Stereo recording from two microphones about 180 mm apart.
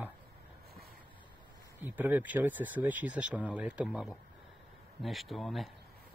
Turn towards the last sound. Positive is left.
turn(degrees=0)  # may be behind; listen again after turning